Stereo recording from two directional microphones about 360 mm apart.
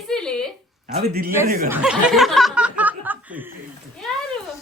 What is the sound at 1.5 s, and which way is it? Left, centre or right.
Speech, right.